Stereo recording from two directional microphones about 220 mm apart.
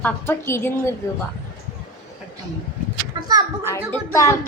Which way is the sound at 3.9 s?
15° left (ahead or behind).